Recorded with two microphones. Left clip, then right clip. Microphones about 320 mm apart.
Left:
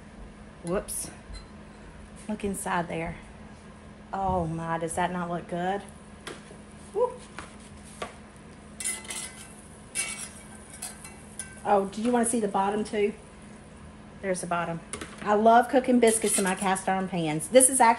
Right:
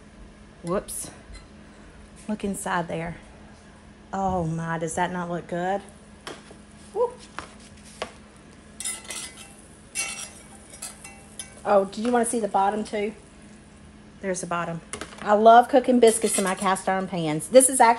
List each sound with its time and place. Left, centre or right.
0.7 s speech: right
2.2 s speech: right
4.1 s speech: right
6.9 s a sound: right
11.6 s speech: right
14.2 s speech: right